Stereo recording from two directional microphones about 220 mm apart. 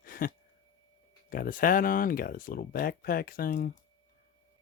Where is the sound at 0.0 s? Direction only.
40° left (ahead or behind).